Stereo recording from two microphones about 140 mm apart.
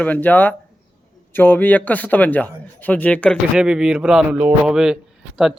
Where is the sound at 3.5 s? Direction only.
5° right (ahead or behind).